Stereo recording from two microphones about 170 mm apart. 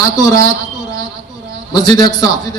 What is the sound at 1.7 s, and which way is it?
Speech, 20° left (ahead or behind).